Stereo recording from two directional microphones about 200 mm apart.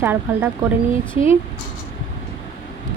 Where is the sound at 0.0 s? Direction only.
10° right (ahead or behind).